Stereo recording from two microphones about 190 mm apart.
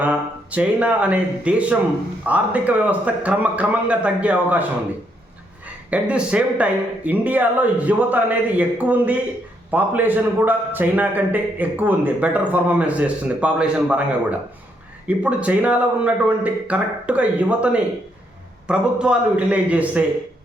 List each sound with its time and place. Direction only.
0.0 s a man's voice: 5° right (ahead or behind)
5.9 s a man's voice: 5° right (ahead or behind)